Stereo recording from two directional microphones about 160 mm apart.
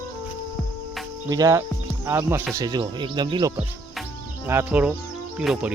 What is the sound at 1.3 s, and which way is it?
Speech, 20° right (ahead or behind).